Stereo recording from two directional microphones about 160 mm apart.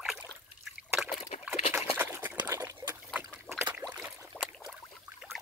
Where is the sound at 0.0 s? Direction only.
Centre (ahead or behind).